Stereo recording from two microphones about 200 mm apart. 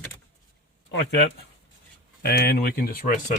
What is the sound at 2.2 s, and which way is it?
Speech, 50° left (ahead or behind).